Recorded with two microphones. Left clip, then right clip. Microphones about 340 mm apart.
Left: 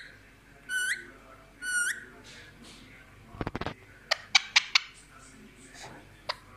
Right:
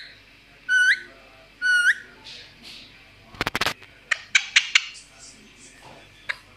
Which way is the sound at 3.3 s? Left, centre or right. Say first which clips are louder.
Right 12 dB; right.